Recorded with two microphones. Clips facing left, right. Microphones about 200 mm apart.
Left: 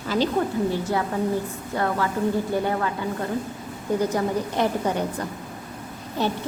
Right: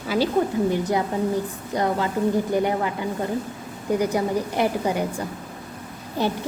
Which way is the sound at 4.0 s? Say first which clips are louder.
Right 1 dB; 10° right (ahead or behind).